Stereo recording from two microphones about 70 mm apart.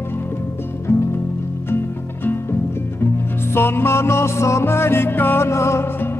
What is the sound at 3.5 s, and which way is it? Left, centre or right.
Music, left.